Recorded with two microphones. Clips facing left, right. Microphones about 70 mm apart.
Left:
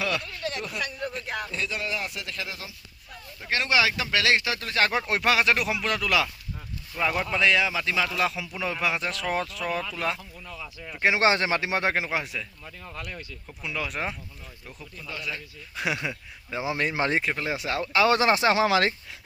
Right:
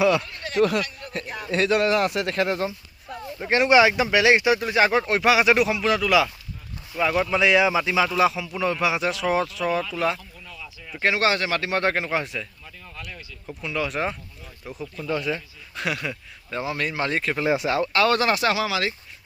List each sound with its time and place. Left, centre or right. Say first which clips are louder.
0.5 s a man's voice: right 11 dB; right
3.4 s speech: right 7 dB; right
4.9 s speech: right 5 dB; centre
10.4 s a sound: left 2 dB; left
11.1 s speech: even; left
11.6 s speech: right 2 dB; centre
13.6 s speech: right 5 dB; centre
15.0 s speech: right 9 dB; right
15.7 s speech: right 1 dB; centre
16.7 s speech: left 1 dB; left
17.7 s speech: right 6 dB; centre
18.1 s speech: even; left
18.5 s speech: left 3 dB; left